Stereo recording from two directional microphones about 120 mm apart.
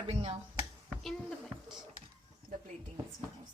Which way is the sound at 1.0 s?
5° left (ahead or behind).